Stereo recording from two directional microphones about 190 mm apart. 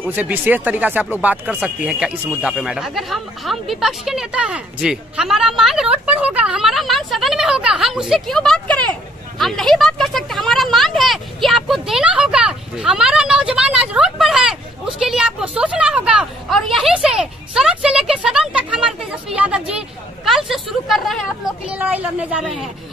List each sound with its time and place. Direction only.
0.1 s speech: 10° right (ahead or behind)